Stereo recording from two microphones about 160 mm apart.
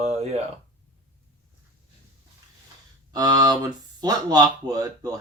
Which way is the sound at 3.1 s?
25° right (ahead or behind).